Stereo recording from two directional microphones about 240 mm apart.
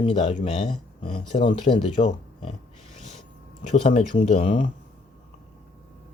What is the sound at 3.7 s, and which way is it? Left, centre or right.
Speech, left.